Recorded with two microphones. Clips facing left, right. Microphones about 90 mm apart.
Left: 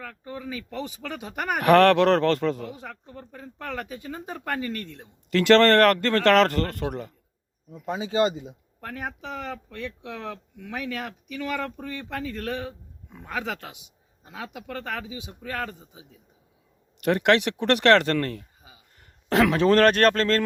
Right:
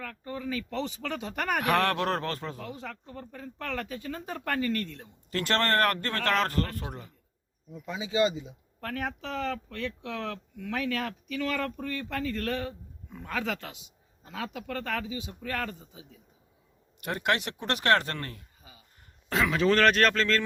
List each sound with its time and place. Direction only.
0.0 s speech: 10° left (ahead or behind)
1.6 s speech: 70° left (ahead or behind)
2.8 s speech: 10° left (ahead or behind)
5.3 s speech: 90° left; by 7.1 s 75° left (ahead or behind)
7.7 s speech: 45° left (ahead or behind)
8.8 s speech: 10° left (ahead or behind)
17.0 s speech: 70° left (ahead or behind)
18.9 s a sound: 75° left (ahead or behind)
19.5 s speech: 40° left (ahead or behind)